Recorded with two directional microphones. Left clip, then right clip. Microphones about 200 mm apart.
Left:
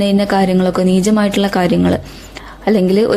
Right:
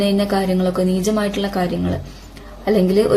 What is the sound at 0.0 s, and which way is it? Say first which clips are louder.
A woman's voice: left 4 dB; 40° left (ahead or behind).